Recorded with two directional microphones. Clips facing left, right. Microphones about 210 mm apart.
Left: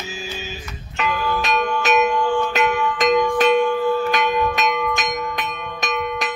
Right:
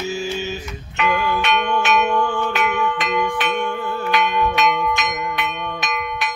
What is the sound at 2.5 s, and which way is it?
Bell, 40° left (ahead or behind).